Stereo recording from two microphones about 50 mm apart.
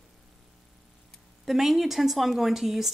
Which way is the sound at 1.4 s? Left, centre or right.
Centre.